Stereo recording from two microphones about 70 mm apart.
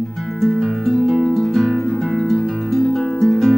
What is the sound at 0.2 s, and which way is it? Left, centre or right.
Music, centre.